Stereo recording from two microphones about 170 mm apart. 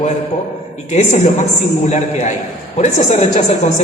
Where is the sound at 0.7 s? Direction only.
40° left (ahead or behind).